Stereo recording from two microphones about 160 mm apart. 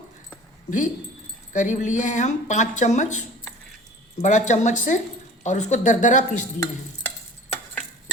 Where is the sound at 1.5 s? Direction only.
50° left (ahead or behind).